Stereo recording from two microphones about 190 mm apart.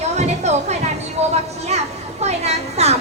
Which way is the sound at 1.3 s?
35° right (ahead or behind).